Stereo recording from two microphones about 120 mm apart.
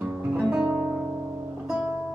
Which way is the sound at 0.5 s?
15° right (ahead or behind).